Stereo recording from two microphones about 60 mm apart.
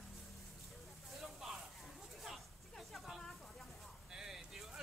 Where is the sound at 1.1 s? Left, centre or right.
Centre.